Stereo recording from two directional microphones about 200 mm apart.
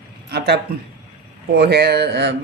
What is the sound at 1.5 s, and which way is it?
Speech, 55° right (ahead or behind).